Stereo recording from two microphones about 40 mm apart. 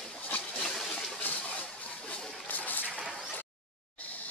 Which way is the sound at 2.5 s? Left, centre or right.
Left.